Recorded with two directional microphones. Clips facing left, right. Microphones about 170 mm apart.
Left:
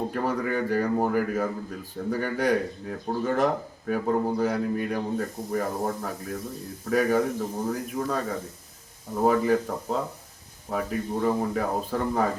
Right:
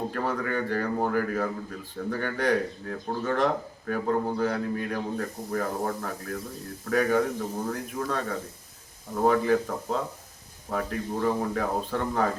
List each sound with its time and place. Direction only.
0.1 s speech: 5° left (ahead or behind)